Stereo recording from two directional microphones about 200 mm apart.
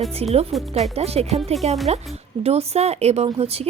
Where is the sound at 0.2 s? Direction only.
30° right (ahead or behind).